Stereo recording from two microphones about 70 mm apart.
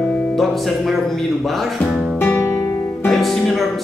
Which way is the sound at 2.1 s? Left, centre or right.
Left.